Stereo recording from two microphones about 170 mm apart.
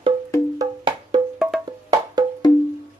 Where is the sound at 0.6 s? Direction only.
30° right (ahead or behind).